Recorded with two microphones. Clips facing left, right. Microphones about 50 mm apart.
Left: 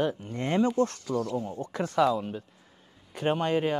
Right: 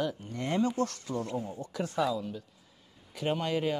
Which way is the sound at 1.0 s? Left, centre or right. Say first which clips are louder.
Left 4 dB; right.